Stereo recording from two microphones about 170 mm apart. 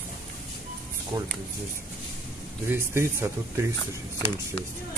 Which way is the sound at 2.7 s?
15° right (ahead or behind).